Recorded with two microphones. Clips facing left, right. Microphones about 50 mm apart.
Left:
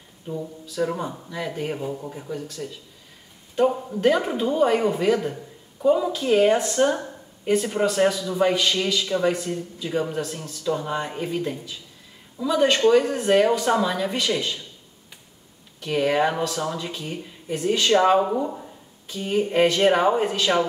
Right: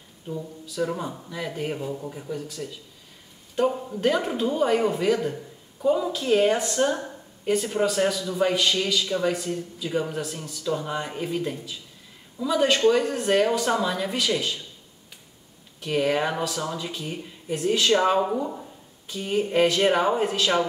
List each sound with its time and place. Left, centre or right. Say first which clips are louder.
0.3 s speech: left 2 dB; centre
2.4 s a woman's voice: left 1 dB; centre
15.8 s speech: left 2 dB; centre
17.9 s speech: left 6 dB; centre
18.4 s speech: left 2 dB; centre